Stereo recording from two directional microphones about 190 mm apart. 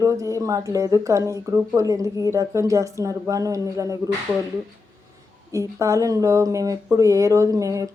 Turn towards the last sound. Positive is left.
turn(degrees=-15)  # may be behind; listen again after turning